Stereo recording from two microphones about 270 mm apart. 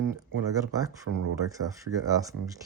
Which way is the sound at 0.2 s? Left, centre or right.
Centre.